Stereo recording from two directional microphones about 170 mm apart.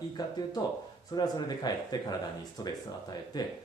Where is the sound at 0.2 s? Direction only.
20° left (ahead or behind).